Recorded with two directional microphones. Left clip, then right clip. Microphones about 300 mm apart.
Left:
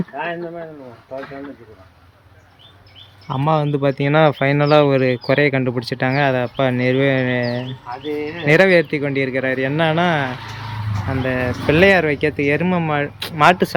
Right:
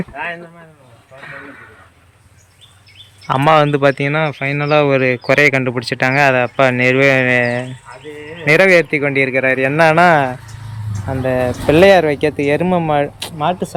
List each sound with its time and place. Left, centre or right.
0.1 s speech: left
3.2 s speech: centre
13.4 s speech: left